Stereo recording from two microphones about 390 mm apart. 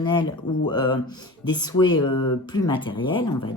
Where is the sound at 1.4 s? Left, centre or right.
Centre.